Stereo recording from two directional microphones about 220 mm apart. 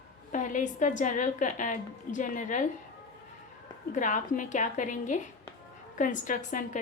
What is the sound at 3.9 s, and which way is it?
A woman's voice, 35° left (ahead or behind).